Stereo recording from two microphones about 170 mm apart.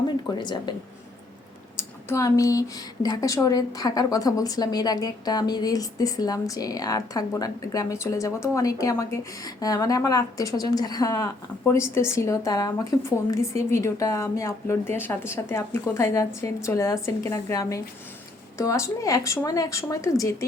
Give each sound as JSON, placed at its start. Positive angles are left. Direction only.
{"t": 0.3, "sound": "a woman's voice", "side_deg": 25}
{"t": 2.0, "sound": "a woman's voice", "side_deg": 20}